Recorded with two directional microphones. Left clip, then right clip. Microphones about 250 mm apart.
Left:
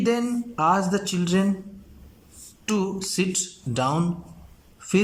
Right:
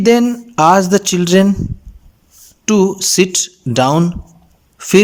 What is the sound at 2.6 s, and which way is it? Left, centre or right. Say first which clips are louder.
Speech: right 14 dB; right.